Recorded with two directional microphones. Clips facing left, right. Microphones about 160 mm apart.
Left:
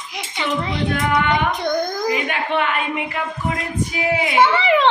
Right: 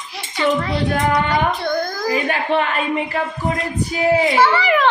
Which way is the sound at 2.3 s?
35° right (ahead or behind).